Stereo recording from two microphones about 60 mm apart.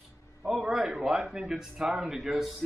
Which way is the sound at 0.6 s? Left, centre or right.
Centre.